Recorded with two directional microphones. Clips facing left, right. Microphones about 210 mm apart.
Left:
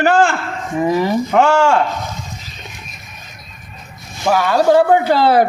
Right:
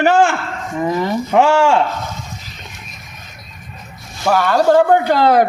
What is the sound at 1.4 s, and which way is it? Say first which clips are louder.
Speech: even; 20° right (ahead or behind).